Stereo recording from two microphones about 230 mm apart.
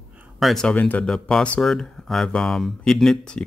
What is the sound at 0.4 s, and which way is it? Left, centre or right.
Speech, centre.